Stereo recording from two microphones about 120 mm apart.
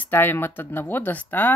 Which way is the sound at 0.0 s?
15° left (ahead or behind).